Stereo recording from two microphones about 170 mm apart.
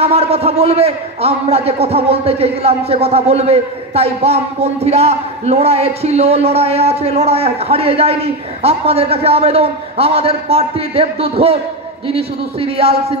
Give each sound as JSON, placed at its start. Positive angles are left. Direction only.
{"t": 0.0, "sound": "a man's voice", "side_deg": -35}